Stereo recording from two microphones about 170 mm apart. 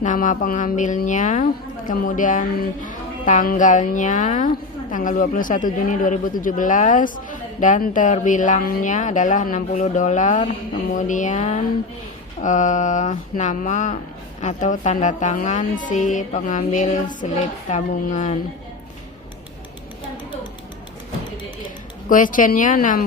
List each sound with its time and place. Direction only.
0.0 s speech: 50° left (ahead or behind)
22.1 s speech: 50° left (ahead or behind)